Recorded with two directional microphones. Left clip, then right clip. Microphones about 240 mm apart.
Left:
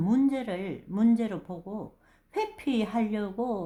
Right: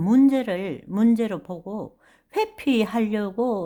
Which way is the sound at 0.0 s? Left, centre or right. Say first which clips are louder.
Right 8 dB; right.